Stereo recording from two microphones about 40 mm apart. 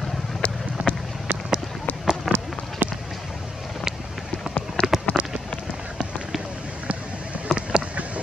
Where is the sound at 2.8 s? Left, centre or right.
Right.